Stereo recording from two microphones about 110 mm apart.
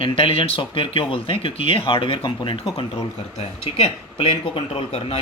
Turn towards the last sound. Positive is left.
turn(degrees=55)  # may be behind; listen again after turning